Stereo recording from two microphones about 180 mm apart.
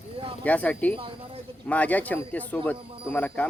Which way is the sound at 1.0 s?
30° right (ahead or behind).